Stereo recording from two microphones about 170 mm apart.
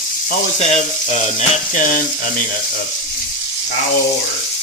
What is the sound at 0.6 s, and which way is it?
Frying, 40° left (ahead or behind).